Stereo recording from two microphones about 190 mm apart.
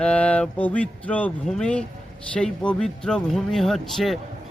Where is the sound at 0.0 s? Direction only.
5° left (ahead or behind).